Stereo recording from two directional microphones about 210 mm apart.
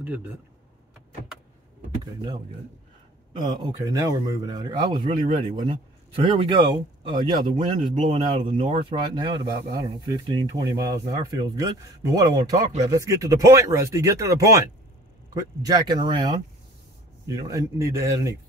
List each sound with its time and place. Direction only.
3.5 s speech: 20° right (ahead or behind)
17.4 s speech: 15° right (ahead or behind)